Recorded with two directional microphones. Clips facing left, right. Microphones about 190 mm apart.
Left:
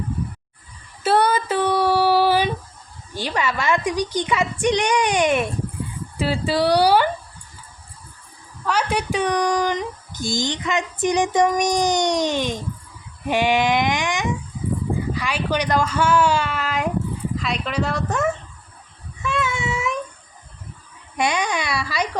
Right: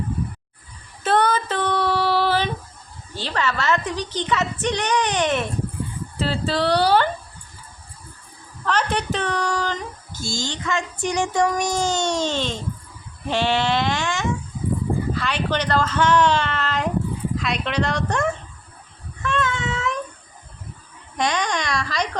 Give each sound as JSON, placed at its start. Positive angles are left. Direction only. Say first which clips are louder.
{"t": 1.0, "sound": "female singing", "louder": "left 1 dB", "side_deg": 10}
{"t": 3.2, "sound": "speech", "louder": "left 1 dB", "side_deg": 10}
{"t": 8.6, "sound": "speech", "louder": "left 1 dB", "side_deg": 10}
{"t": 19.2, "sound": "a sound", "louder": "even", "side_deg": 10}
{"t": 21.2, "sound": "speech", "louder": "left 1 dB", "side_deg": 10}